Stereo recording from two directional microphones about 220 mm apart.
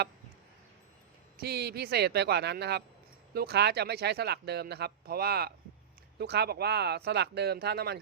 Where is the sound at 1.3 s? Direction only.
45° right (ahead or behind).